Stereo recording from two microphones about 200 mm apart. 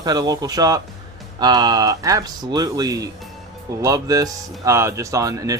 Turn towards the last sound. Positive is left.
turn(degrees=-15)  # may be behind; listen again after turning